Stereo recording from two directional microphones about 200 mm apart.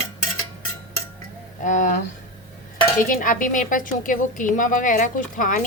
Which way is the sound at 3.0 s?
40° left (ahead or behind).